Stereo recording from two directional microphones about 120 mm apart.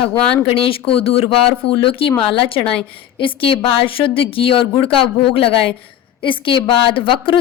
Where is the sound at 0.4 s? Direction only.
50° left (ahead or behind).